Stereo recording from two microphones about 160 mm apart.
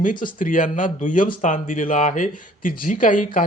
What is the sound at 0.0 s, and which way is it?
Speech, 55° left (ahead or behind).